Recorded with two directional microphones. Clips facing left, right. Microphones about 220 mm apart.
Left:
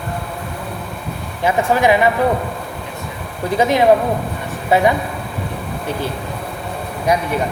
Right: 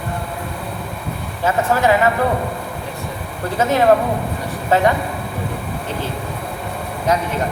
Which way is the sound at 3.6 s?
15° left (ahead or behind).